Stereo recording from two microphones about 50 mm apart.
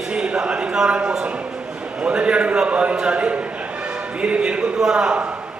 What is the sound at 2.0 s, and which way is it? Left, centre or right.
A man's voice, centre.